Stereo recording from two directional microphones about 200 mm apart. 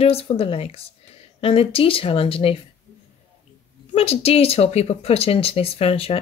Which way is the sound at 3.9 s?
30° left (ahead or behind).